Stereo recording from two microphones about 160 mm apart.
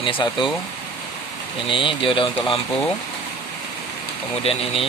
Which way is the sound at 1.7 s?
30° left (ahead or behind).